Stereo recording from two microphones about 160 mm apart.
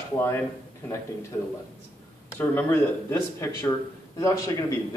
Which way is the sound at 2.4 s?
15° left (ahead or behind).